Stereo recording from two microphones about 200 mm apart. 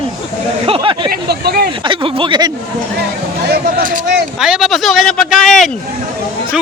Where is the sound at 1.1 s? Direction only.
50° right (ahead or behind).